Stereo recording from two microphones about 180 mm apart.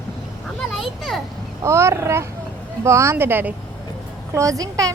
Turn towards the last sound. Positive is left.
turn(degrees=-20)  # may be behind; listen again after turning